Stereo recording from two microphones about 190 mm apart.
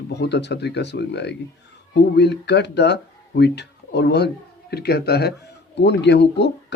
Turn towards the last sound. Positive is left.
turn(degrees=65)  # may be behind; listen again after turning